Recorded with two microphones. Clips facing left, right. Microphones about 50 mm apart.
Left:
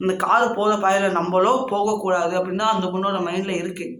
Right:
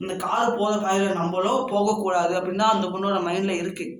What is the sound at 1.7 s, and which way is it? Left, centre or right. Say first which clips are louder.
A man's voice: left 2 dB; left.